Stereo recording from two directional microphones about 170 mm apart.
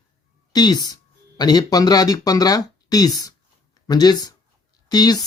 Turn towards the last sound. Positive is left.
turn(degrees=25)  # may be behind; listen again after turning